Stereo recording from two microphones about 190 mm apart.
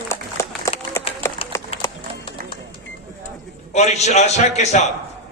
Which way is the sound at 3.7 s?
35° left (ahead or behind).